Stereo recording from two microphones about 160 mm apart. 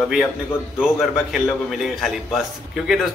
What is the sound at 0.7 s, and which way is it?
Speech, 5° right (ahead or behind).